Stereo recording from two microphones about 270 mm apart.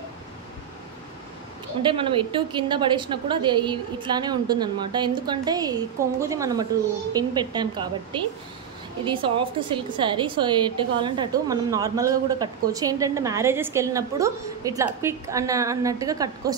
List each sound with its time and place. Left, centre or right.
1.8 s a woman's voice: centre